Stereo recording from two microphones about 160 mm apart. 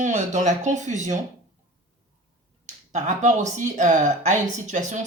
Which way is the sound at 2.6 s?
50° right (ahead or behind).